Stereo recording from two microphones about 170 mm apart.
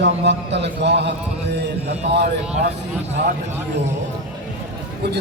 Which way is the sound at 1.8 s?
75° right (ahead or behind).